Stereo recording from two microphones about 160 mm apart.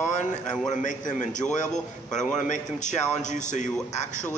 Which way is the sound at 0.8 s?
50° left (ahead or behind).